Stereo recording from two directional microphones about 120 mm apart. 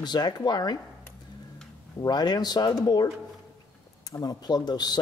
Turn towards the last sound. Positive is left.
turn(degrees=35)  # may be behind; listen again after turning